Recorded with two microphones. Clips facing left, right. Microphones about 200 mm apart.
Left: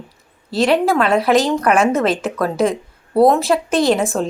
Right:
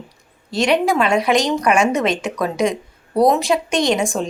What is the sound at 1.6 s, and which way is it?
Speech, 15° right (ahead or behind).